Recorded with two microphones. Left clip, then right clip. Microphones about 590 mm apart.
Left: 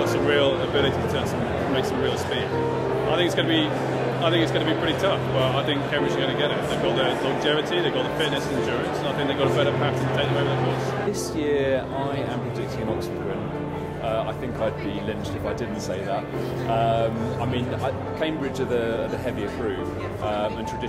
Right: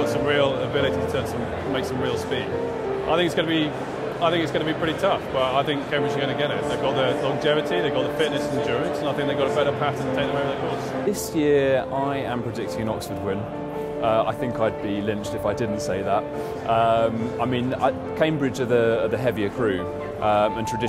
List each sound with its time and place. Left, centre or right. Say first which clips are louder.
0.0 s vehicle: even; right
3.1 s speech: right 2 dB; right
11.1 s speech: right 7 dB; right
16.7 s speech: right 3 dB; right